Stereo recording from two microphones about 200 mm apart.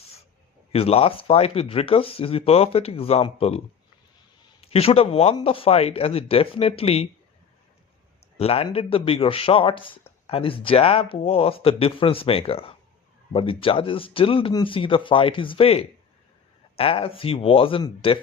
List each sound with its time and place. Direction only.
0.7 s speech: 30° left (ahead or behind)
4.6 s speech: 30° left (ahead or behind)
8.4 s speech: 30° left (ahead or behind)